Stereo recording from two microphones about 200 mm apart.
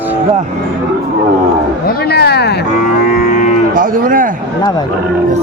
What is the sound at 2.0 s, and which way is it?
Speech, 55° left (ahead or behind).